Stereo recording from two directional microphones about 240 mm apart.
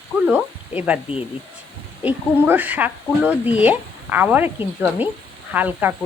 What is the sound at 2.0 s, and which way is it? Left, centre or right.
Speech, centre.